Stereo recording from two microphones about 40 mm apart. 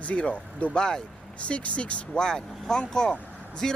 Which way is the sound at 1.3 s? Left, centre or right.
Left.